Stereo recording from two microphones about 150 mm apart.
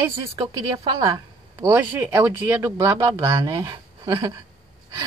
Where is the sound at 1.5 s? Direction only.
15° right (ahead or behind).